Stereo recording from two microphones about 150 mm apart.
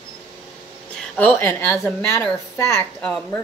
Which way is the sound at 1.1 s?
15° left (ahead or behind).